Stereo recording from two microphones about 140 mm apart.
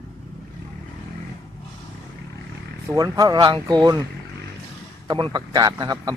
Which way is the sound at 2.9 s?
25° right (ahead or behind).